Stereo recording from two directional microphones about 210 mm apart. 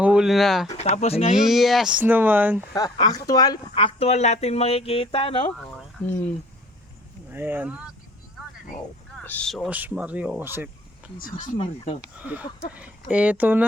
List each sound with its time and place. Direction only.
0.0 s speech: 5° right (ahead or behind)
0.8 s speech: 30° left (ahead or behind)
1.4 s speech: centre (ahead or behind)
2.7 s speech: 20° left (ahead or behind)
6.1 s speech: 10° left (ahead or behind)
7.3 s speech: 10° right (ahead or behind)
9.2 s speech: 5° left (ahead or behind)
11.2 s speech: 40° left (ahead or behind)
12.2 s speech: 5° right (ahead or behind)